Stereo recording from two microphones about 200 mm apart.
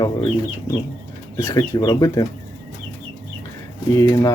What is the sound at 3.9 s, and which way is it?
Speech, 15° left (ahead or behind).